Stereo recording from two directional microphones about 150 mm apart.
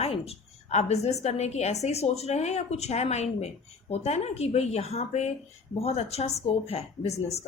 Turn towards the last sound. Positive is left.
turn(degrees=45)  # may be behind; listen again after turning